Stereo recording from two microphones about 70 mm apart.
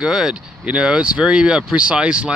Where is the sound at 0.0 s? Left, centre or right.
Centre.